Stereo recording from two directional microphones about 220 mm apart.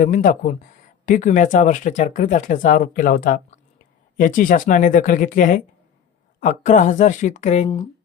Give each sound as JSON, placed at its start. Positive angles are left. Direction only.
{"t": 0.0, "sound": "speech", "side_deg": 35}